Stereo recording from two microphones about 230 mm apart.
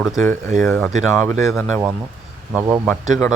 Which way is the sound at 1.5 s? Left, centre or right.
Centre.